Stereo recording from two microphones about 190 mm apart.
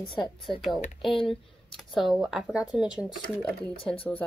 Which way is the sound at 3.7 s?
30° left (ahead or behind).